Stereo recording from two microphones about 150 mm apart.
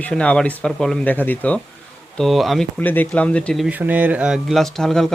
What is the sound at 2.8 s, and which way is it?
Speech, 10° left (ahead or behind).